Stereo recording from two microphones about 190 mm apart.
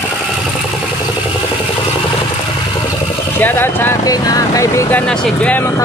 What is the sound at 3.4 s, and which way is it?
Speech, 10° left (ahead or behind).